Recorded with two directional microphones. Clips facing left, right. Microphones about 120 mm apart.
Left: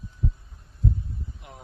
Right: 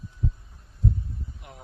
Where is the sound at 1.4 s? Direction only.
25° left (ahead or behind).